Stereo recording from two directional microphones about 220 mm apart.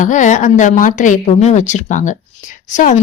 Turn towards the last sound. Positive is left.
turn(degrees=35)  # may be behind; listen again after turning